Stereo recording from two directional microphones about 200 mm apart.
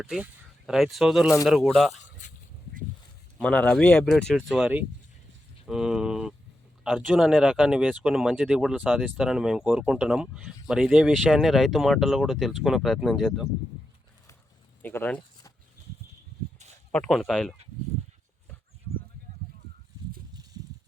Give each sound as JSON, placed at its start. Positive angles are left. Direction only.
{"t": 0.0, "sound": "speech", "side_deg": 0}
{"t": 3.3, "sound": "speech", "side_deg": 5}
{"t": 14.8, "sound": "a sound", "side_deg": 10}
{"t": 16.9, "sound": "speech", "side_deg": 5}